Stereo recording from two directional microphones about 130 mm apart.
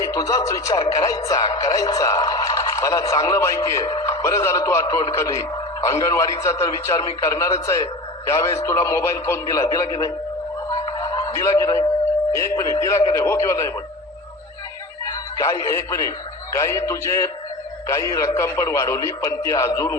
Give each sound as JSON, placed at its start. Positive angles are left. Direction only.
{"t": 0.0, "sound": "a man's voice", "side_deg": 30}
{"t": 10.7, "sound": "music", "side_deg": 30}
{"t": 12.3, "sound": "a man's voice", "side_deg": 20}
{"t": 15.0, "sound": "a man's voice", "side_deg": 25}